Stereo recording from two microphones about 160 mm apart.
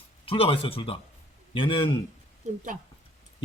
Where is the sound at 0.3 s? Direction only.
35° left (ahead or behind).